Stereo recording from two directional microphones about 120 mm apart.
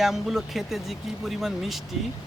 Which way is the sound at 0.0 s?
Centre (ahead or behind).